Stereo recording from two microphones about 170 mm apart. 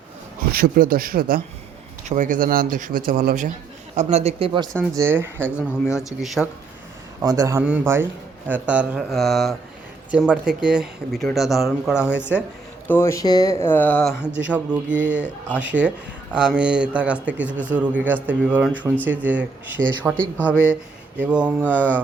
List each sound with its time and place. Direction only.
0.5 s speech: 60° right (ahead or behind)
3.9 s speech: 40° right (ahead or behind)
4.8 s speech: 15° right (ahead or behind)
6.0 s speech: centre (ahead or behind)
7.2 s a man's voice: 20° right (ahead or behind); by 12.1 s 5° right (ahead or behind)
12.9 s speech: 15° left (ahead or behind)
14.4 s speech: 10° right (ahead or behind)
15.0 s speech: 10° left (ahead or behind)
15.5 s speech: 10° right (ahead or behind)
20.1 s speech: 10° left (ahead or behind)
21.2 s speech: 5° right (ahead or behind)